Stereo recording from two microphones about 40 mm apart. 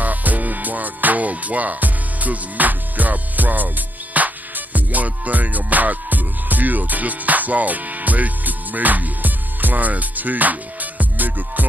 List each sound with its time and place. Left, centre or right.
0.0 s music: right